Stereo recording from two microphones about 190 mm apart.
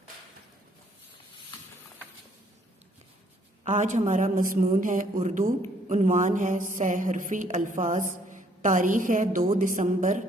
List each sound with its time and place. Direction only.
3.6 s a man's voice: 40° right (ahead or behind)
5.9 s mantra: 40° right (ahead or behind)